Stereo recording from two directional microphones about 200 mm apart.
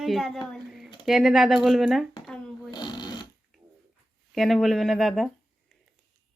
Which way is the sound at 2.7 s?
20° left (ahead or behind).